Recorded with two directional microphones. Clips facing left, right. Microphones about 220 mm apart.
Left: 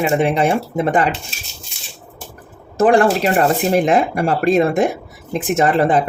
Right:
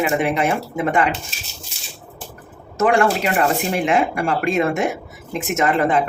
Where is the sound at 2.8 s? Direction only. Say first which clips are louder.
Left 4 dB; 35° left (ahead or behind).